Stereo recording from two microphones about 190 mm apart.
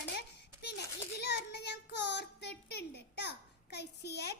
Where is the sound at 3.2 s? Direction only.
60° left (ahead or behind).